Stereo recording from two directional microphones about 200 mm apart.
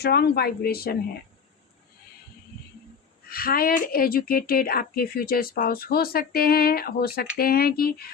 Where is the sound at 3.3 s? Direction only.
50° left (ahead or behind).